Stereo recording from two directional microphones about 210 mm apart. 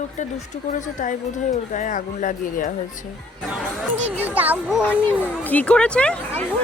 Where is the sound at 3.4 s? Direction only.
Centre (ahead or behind).